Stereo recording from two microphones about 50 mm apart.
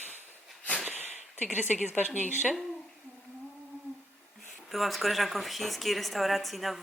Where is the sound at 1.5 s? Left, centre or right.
Right.